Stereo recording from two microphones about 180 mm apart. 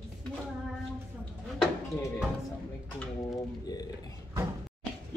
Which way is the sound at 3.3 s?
20° left (ahead or behind).